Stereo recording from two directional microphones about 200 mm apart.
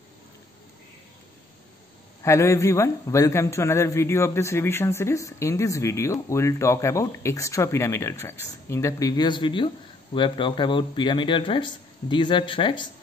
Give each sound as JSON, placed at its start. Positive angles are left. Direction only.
{"t": 2.2, "sound": "a man's voice", "side_deg": 15}